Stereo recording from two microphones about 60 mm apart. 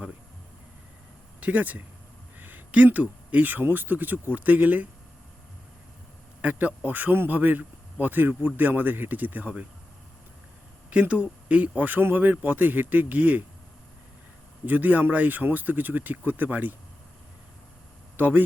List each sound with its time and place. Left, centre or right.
1.4 s speech: right
6.4 s a man's voice: right
10.8 s a man's voice: right
14.7 s a man's voice: right
18.2 s speech: right